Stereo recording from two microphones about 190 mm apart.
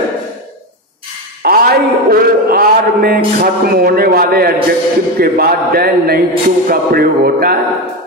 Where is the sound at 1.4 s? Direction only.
50° right (ahead or behind).